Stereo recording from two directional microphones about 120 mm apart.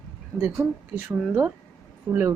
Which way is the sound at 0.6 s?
10° right (ahead or behind).